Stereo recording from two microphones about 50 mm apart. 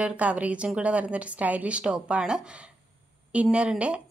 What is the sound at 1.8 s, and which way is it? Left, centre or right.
A woman's voice, centre.